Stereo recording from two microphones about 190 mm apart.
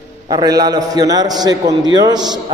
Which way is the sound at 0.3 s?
20° right (ahead or behind).